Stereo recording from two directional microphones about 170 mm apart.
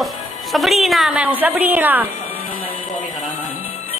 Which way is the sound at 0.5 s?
Centre (ahead or behind).